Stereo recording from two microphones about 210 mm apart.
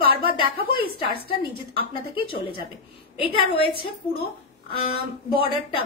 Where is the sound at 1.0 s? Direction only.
25° left (ahead or behind).